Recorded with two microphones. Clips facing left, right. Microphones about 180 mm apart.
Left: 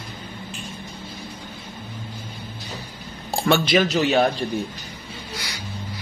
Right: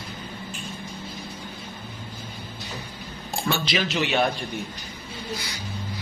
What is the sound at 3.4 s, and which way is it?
Speech, 70° left (ahead or behind).